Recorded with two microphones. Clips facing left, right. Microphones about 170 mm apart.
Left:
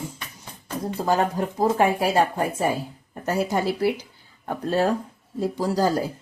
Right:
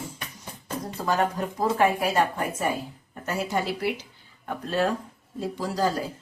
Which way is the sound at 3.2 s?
40° left (ahead or behind).